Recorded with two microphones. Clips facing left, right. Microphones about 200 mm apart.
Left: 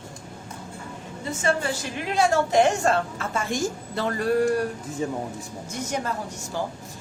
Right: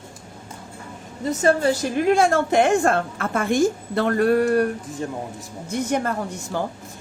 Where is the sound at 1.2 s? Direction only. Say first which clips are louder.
Right 7 dB; 40° right (ahead or behind); by 4.7 s 60° right (ahead or behind).